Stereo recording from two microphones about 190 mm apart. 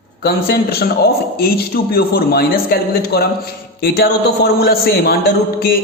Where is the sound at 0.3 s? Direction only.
50° left (ahead or behind).